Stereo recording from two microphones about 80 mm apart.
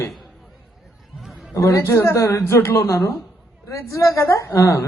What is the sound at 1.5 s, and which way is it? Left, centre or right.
A woman's voice, left.